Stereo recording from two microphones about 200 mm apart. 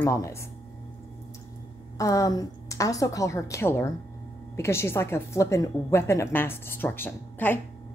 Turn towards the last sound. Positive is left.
turn(degrees=10)  # may be behind; listen again after turning